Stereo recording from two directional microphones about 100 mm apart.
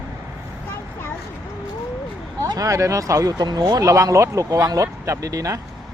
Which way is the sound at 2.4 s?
40° right (ahead or behind).